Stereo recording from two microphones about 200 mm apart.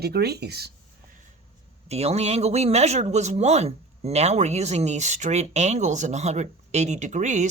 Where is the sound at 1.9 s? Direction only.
30° right (ahead or behind).